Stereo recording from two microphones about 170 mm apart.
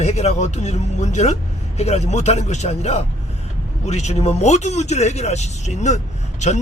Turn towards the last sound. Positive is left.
turn(degrees=40)  # may be behind; listen again after turning